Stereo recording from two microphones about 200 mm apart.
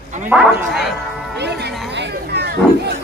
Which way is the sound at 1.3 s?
55° right (ahead or behind).